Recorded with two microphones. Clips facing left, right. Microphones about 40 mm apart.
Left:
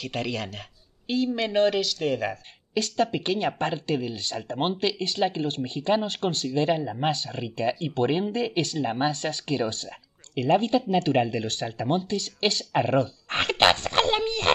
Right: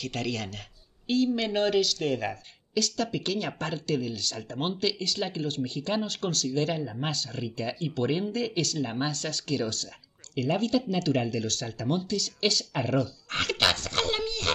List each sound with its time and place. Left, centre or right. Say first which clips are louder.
0.0 s speech: left 2 dB; centre
2.7 s speech: left 4 dB; left